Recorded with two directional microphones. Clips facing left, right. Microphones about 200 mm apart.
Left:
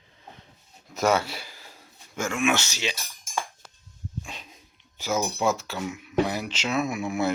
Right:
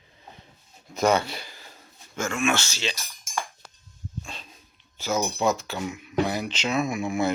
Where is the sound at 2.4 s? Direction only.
15° left (ahead or behind).